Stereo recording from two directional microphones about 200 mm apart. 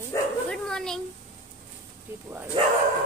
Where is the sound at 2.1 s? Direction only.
10° right (ahead or behind).